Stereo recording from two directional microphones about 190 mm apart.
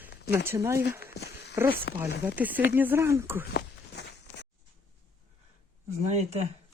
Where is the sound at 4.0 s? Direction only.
60° left (ahead or behind).